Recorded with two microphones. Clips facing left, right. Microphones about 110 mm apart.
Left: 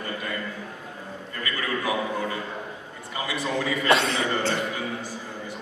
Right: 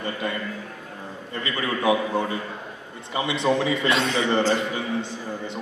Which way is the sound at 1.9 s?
25° right (ahead or behind).